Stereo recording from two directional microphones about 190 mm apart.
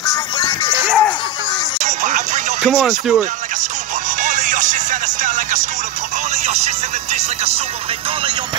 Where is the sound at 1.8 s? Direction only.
40° right (ahead or behind).